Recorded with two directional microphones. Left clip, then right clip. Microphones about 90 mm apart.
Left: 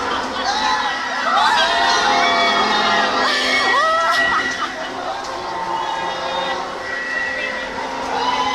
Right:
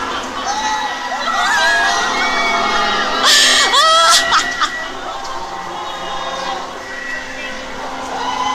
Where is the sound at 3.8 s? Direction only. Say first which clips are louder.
Right 6 dB; 25° right (ahead or behind).